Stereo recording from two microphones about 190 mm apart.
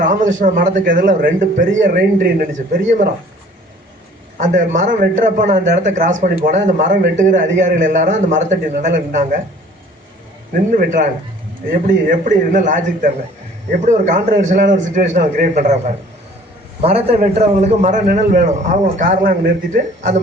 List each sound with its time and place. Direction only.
0.0 s speech: 40° right (ahead or behind)
4.4 s a man's voice: 40° right (ahead or behind)
10.5 s a man's voice: 45° right (ahead or behind)
16.8 s a man's voice: 35° right (ahead or behind)